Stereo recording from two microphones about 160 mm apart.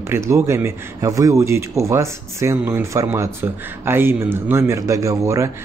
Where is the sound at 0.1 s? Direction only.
15° right (ahead or behind).